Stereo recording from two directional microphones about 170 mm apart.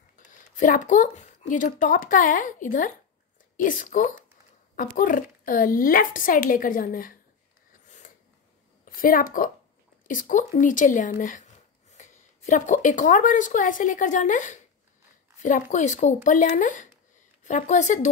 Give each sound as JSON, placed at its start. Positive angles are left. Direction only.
{"t": 0.2, "sound": "a woman's voice", "side_deg": 50}
{"t": 8.9, "sound": "a woman's voice", "side_deg": 55}